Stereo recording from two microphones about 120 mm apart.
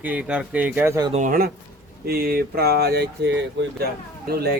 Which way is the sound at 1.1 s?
90° right.